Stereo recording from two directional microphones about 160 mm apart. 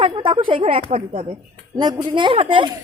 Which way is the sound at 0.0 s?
35° right (ahead or behind).